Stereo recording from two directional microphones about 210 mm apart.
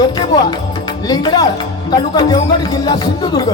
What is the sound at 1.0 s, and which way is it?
Speech, 20° left (ahead or behind).